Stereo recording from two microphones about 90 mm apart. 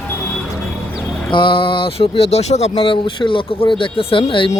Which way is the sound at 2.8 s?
70° left (ahead or behind).